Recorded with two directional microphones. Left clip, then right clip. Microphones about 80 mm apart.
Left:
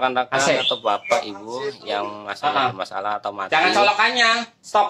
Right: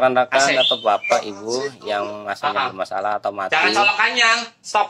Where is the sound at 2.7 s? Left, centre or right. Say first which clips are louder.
Right 3 dB; centre.